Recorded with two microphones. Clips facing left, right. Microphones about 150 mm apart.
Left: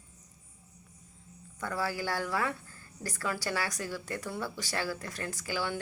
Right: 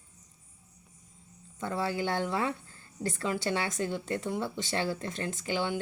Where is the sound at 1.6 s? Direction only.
25° right (ahead or behind).